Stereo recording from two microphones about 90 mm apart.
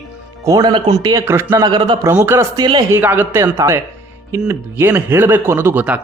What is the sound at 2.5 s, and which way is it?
Speech, 50° right (ahead or behind).